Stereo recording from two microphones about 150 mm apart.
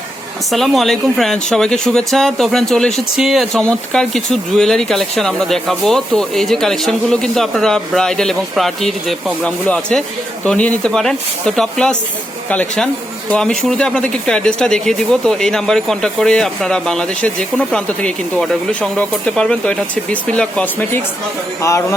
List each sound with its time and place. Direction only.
0.5 s speech: centre (ahead or behind); by 21.9 s 20° left (ahead or behind)